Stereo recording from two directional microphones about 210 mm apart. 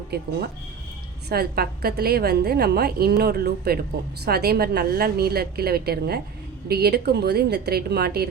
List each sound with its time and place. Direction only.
0.1 s a woman's voice: 50° right (ahead or behind)
1.3 s a woman's voice: 50° right (ahead or behind)